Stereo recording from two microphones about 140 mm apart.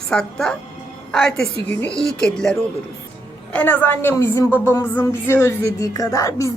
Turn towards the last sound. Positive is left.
turn(degrees=25)  # may be behind; listen again after turning